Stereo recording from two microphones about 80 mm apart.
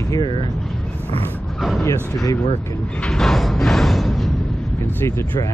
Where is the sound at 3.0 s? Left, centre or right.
Centre.